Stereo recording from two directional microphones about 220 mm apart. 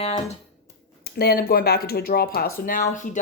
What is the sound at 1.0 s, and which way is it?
Speech, 45° left (ahead or behind).